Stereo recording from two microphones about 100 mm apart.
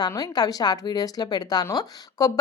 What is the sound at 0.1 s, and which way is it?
A woman's voice, 40° left (ahead or behind).